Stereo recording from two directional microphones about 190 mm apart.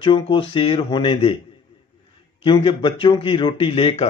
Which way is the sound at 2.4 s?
25° left (ahead or behind).